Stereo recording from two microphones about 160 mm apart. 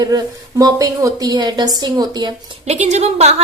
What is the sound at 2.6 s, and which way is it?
Speech, 45° right (ahead or behind).